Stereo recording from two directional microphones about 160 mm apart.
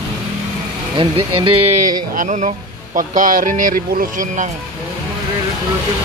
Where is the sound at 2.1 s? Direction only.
50° right (ahead or behind).